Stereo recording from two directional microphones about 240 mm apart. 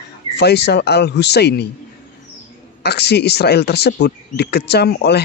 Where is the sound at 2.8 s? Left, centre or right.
Left.